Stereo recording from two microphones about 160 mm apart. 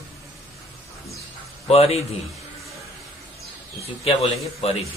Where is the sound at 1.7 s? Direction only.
40° left (ahead or behind).